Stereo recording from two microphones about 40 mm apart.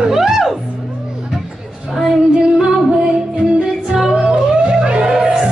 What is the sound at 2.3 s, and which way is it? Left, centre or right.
Music, centre.